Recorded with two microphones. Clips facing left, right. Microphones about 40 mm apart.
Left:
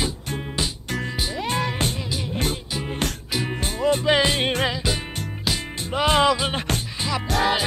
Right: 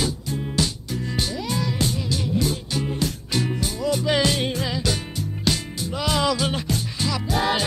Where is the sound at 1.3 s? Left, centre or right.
Left.